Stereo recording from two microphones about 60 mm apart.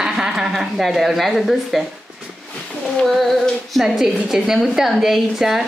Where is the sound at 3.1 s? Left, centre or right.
Centre.